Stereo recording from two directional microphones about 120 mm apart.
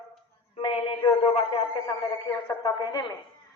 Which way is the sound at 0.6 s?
50° left (ahead or behind).